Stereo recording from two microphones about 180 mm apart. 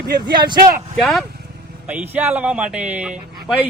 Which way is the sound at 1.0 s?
Centre (ahead or behind).